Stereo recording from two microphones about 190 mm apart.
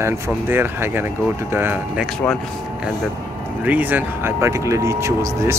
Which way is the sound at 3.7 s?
10° right (ahead or behind).